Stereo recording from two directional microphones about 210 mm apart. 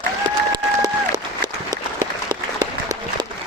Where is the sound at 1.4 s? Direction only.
20° right (ahead or behind).